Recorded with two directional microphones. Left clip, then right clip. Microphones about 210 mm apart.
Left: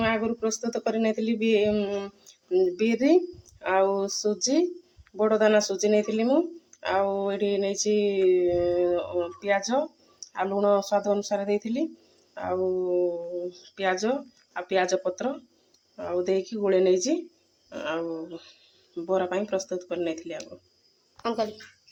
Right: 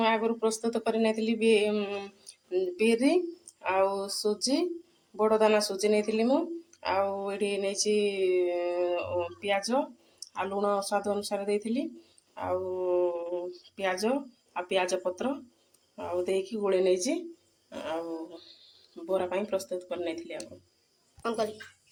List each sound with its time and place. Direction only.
0.0 s speech: 35° left (ahead or behind)
13.7 s speech: 35° left (ahead or behind)
21.2 s speech: centre (ahead or behind)